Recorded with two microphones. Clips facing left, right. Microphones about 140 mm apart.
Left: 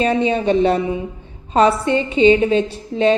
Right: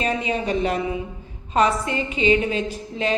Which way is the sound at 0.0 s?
30° left (ahead or behind).